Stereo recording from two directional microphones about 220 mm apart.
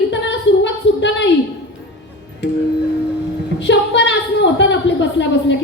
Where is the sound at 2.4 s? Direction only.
55° left (ahead or behind).